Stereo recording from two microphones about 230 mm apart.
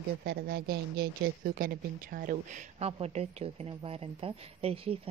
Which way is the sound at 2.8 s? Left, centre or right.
Right.